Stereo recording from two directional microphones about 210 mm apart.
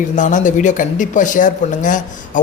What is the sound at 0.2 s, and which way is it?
Speech, 35° left (ahead or behind).